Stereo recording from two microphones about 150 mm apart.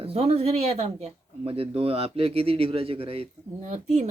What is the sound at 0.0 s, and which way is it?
A woman's voice, 40° right (ahead or behind).